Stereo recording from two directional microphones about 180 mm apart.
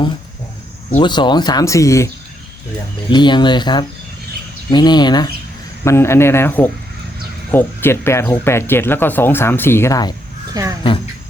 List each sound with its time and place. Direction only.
0.9 s speech: 30° left (ahead or behind)
3.1 s speech: 25° left (ahead or behind)
10.5 s speech: 20° right (ahead or behind)